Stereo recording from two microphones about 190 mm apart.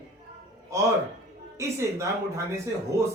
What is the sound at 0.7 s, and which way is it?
A man's voice, 15° right (ahead or behind).